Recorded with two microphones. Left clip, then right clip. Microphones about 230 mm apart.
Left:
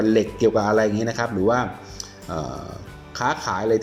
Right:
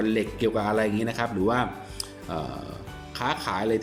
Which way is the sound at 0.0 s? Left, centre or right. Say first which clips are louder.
Left 7 dB; centre.